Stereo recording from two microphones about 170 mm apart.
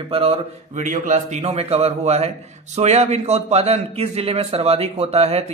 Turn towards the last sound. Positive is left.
turn(degrees=-35)  # may be behind; listen again after turning